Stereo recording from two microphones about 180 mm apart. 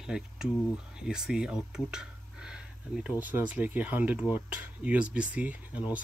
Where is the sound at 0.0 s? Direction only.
5° right (ahead or behind).